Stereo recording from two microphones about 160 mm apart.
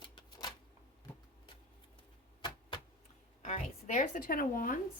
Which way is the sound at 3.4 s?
50° left (ahead or behind).